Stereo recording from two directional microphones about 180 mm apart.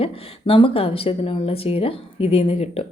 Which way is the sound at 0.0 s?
30° left (ahead or behind).